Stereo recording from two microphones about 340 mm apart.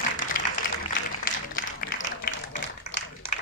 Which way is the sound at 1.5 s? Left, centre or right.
Left.